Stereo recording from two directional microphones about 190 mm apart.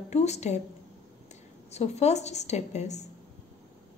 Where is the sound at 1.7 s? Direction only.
35° left (ahead or behind).